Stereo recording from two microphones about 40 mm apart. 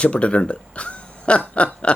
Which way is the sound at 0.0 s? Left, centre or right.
Left.